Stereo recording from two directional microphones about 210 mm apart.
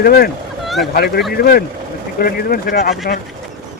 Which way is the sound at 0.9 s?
50° left (ahead or behind).